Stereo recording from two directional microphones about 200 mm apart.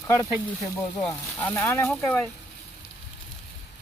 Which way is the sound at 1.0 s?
10° left (ahead or behind).